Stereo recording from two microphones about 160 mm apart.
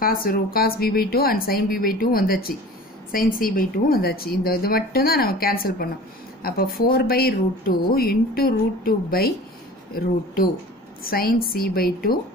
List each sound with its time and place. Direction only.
0.0 s speech: 65° left (ahead or behind)